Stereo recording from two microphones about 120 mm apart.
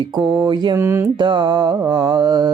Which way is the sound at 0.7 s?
20° right (ahead or behind).